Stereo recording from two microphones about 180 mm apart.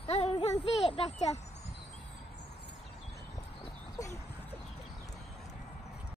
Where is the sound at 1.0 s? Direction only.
40° left (ahead or behind).